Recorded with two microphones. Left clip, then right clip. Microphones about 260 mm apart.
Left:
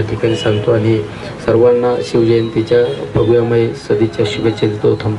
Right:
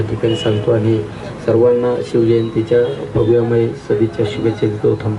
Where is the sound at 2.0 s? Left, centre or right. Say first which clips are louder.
Left 2 dB; centre.